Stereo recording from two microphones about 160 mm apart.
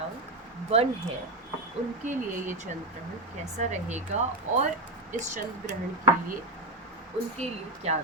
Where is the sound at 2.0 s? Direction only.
50° right (ahead or behind).